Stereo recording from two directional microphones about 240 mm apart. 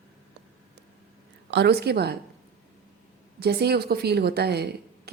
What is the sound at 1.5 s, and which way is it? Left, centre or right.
Speech, right.